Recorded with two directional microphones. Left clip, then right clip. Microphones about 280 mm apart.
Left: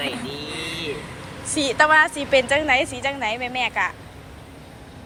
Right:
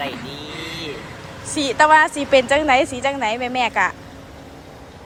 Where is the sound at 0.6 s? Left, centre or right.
Right.